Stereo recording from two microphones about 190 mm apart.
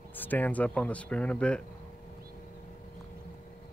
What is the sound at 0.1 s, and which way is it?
Speech, 10° left (ahead or behind).